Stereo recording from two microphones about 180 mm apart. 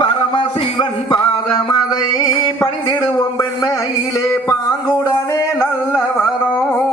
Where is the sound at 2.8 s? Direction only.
25° left (ahead or behind).